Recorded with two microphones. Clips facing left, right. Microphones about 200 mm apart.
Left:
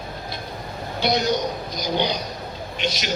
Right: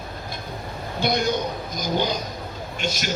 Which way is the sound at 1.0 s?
50° right (ahead or behind).